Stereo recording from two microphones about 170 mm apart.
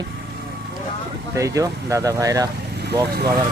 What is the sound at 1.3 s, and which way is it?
Speech, 20° right (ahead or behind).